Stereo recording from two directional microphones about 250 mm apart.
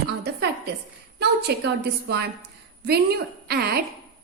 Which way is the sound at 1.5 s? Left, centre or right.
Right.